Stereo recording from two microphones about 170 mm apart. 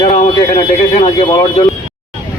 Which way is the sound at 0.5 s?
35° left (ahead or behind).